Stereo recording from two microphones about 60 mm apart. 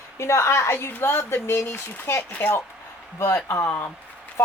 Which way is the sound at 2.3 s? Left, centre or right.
Left.